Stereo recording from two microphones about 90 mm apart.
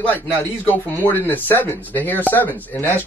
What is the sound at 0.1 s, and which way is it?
Speech, 20° left (ahead or behind).